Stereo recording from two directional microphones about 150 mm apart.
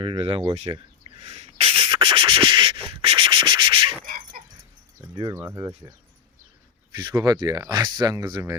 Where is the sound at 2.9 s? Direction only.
40° right (ahead or behind).